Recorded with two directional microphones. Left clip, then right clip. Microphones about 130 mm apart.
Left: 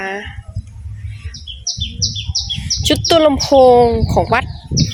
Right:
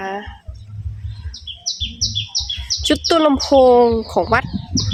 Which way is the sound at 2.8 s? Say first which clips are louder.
Left 3 dB; 20° right (ahead or behind).